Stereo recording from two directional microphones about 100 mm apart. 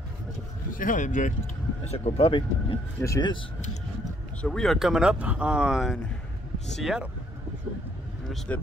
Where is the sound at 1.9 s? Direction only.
80° left.